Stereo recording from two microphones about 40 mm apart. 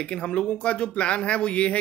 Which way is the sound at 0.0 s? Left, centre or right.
Left.